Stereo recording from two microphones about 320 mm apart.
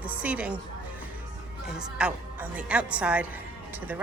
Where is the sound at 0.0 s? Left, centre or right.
Centre.